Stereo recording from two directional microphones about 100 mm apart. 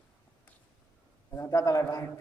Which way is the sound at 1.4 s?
30° left (ahead or behind).